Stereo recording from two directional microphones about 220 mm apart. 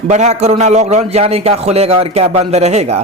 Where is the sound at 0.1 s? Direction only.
30° right (ahead or behind).